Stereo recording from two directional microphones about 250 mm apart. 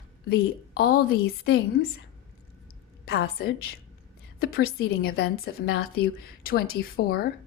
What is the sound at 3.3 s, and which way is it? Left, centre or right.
A woman's voice, left.